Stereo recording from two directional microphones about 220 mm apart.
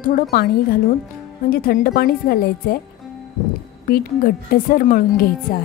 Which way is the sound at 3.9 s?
40° left (ahead or behind).